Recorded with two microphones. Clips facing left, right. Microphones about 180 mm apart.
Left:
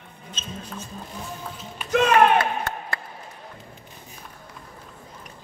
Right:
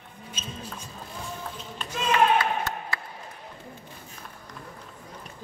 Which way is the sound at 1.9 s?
65° left (ahead or behind).